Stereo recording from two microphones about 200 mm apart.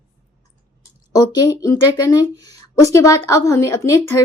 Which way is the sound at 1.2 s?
20° left (ahead or behind).